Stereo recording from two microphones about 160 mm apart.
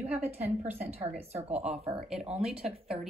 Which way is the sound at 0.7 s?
40° right (ahead or behind).